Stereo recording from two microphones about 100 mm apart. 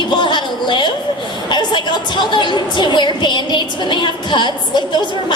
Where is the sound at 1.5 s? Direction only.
50° left (ahead or behind).